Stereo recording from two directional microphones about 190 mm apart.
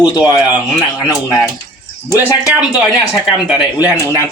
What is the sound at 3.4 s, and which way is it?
Speech, 5° right (ahead or behind).